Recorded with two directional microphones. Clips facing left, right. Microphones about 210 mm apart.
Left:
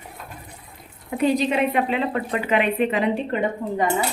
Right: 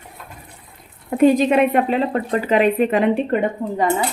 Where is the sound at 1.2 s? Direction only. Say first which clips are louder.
Right 6 dB; 50° right (ahead or behind).